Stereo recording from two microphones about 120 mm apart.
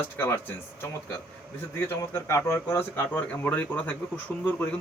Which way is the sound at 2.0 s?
25° left (ahead or behind).